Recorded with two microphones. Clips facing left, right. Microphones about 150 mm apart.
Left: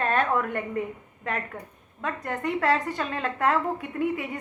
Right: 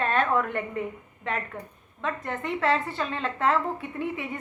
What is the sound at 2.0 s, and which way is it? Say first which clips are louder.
A woman's voice: left 1 dB; 40° left (ahead or behind).